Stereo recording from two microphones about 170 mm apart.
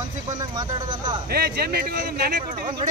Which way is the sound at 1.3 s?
65° right (ahead or behind).